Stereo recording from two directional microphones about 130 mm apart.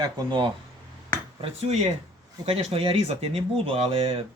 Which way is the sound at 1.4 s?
55° right (ahead or behind).